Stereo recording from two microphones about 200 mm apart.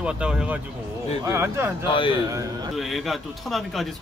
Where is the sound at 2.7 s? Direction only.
Centre (ahead or behind).